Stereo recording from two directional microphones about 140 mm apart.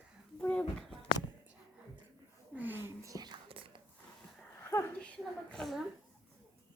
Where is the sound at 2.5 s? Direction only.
15° right (ahead or behind); by 3.6 s 35° right (ahead or behind).